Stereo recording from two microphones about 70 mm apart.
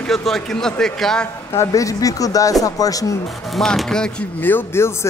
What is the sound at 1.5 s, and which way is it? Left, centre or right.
Speech, left.